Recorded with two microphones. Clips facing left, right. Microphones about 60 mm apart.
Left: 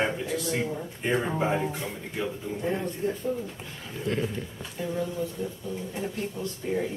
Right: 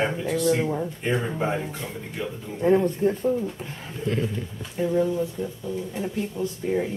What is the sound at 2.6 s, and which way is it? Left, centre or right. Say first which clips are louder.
Speech: right 10 dB; right.